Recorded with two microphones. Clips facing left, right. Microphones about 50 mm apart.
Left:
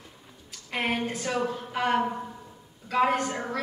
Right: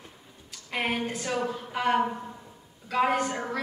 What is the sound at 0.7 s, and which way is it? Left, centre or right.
A woman's voice, centre.